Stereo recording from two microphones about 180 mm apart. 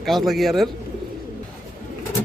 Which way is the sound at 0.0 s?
Centre (ahead or behind).